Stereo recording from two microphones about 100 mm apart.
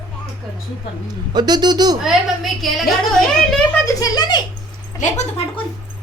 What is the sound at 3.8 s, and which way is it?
Speech, 40° left (ahead or behind).